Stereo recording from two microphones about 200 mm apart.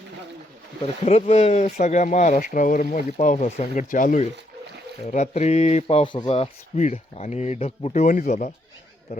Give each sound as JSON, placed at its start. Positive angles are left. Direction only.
{"t": 0.8, "sound": "speech", "side_deg": 30}
{"t": 8.0, "sound": "speech", "side_deg": 40}